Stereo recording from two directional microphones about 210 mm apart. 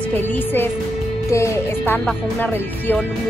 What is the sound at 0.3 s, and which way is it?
Speech, 10° left (ahead or behind).